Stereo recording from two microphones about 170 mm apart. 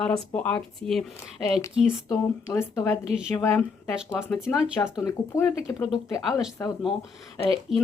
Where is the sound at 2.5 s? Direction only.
15° left (ahead or behind).